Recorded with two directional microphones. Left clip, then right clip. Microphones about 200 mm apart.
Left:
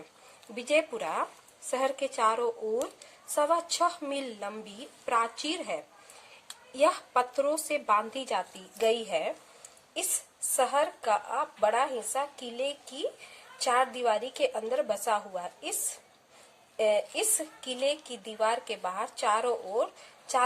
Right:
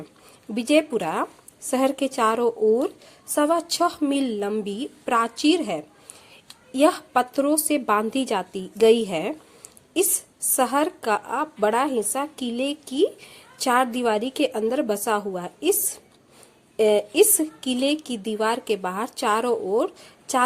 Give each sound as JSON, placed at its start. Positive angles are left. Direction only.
{"t": 0.5, "sound": "a woman's voice", "side_deg": -40}
{"t": 10.5, "sound": "a woman's voice", "side_deg": -40}
{"t": 16.7, "sound": "a woman's voice", "side_deg": -40}